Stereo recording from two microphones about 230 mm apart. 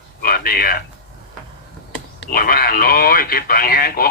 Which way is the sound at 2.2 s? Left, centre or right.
Left.